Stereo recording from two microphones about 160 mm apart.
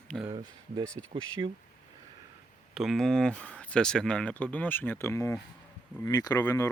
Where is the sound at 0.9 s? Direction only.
30° right (ahead or behind).